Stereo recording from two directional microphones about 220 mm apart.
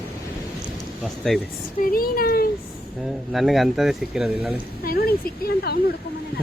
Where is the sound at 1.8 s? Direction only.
40° left (ahead or behind).